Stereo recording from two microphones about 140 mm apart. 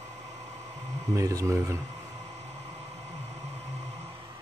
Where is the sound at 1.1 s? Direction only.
25° right (ahead or behind).